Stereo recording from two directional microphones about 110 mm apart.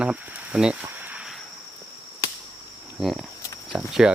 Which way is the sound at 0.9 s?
15° right (ahead or behind).